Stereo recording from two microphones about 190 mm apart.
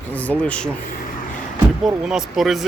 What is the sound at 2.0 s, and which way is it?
Speech, centre (ahead or behind).